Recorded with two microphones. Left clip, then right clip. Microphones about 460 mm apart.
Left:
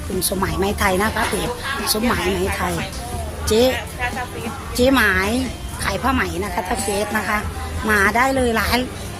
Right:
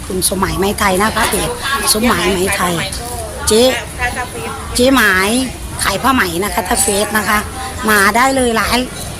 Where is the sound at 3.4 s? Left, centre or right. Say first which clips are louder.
Right 5 dB; left.